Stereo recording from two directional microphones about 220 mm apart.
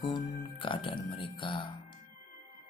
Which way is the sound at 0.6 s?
25° left (ahead or behind).